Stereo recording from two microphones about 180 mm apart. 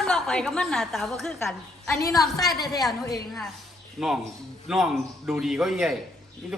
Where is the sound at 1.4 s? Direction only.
15° left (ahead or behind).